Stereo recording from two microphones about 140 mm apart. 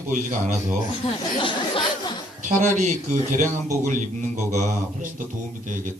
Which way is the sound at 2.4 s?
60° right (ahead or behind).